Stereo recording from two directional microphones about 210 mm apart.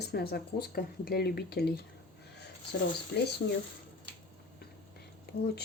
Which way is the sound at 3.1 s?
50° left (ahead or behind).